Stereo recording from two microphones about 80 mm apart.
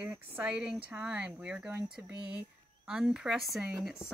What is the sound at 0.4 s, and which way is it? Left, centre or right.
Speech, centre.